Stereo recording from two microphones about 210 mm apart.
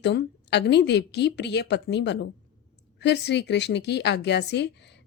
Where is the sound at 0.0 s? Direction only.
55° left (ahead or behind).